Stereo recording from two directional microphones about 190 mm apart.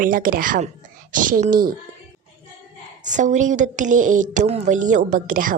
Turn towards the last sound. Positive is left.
turn(degrees=-45)  # may be behind; listen again after turning